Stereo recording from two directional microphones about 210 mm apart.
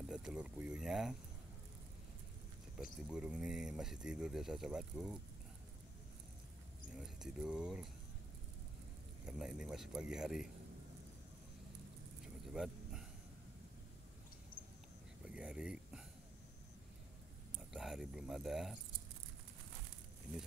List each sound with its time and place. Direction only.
0.1 s speech: 5° right (ahead or behind)
2.8 s speech: 5° right (ahead or behind)
7.0 s speech: 5° right (ahead or behind)
9.2 s speech: 5° right (ahead or behind)
12.5 s a sound: centre (ahead or behind)
15.2 s a sound: 5° right (ahead or behind)
17.7 s speech: centre (ahead or behind)